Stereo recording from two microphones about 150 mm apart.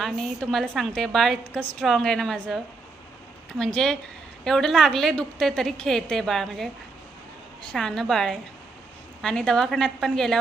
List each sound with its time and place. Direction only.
0.0 s a woman's voice: centre (ahead or behind)
3.6 s a woman's voice: 5° left (ahead or behind)
7.7 s a woman's voice: 5° left (ahead or behind)